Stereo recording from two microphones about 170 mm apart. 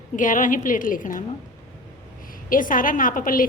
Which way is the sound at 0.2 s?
50° left (ahead or behind).